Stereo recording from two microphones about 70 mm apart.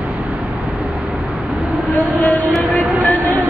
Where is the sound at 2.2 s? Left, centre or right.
Left.